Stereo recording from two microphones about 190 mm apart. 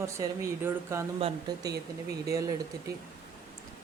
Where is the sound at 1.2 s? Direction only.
25° right (ahead or behind).